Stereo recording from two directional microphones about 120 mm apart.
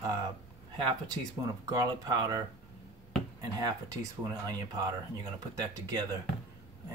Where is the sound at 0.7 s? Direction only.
40° right (ahead or behind).